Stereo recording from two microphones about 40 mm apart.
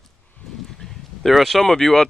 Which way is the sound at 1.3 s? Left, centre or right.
Centre.